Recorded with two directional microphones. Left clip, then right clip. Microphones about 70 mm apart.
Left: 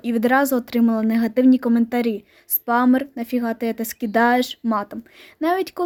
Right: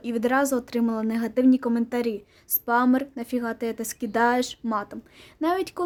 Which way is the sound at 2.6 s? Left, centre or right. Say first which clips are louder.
Left 4 dB; left.